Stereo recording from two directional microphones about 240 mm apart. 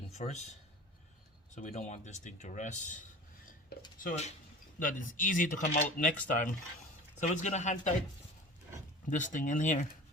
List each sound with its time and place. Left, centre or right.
0.2 s speech: left
1.5 s speech: left
4.0 s speech: left
9.0 s speech: left